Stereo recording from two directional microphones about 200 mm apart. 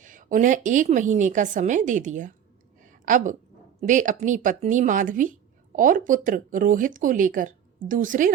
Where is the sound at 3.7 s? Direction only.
40° right (ahead or behind).